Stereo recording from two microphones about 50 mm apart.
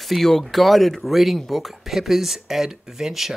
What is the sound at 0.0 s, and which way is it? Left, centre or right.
Speech, centre.